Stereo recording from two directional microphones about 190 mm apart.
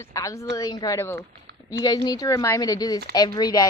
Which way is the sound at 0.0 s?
15° left (ahead or behind).